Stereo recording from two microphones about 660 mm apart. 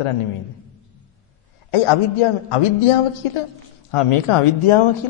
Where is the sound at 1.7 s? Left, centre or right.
Left.